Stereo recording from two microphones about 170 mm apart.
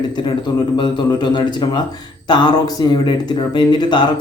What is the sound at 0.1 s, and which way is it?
Speech, 25° left (ahead or behind).